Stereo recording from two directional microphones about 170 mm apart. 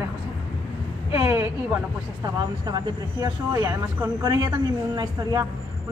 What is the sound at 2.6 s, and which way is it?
Speech, 20° right (ahead or behind).